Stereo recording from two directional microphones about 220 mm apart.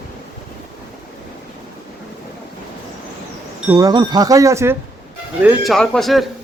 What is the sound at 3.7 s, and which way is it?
Speech, 15° right (ahead or behind).